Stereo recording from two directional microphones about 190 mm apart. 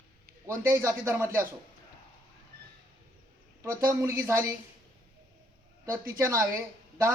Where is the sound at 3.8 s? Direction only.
15° right (ahead or behind).